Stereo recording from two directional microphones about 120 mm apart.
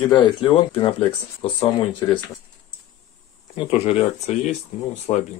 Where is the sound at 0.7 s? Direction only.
50° left (ahead or behind).